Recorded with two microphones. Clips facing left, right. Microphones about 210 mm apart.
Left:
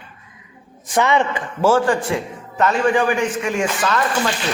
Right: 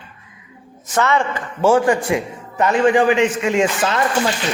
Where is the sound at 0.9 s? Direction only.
15° left (ahead or behind).